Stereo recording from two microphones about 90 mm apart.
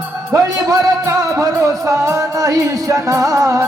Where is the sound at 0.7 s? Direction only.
35° right (ahead or behind).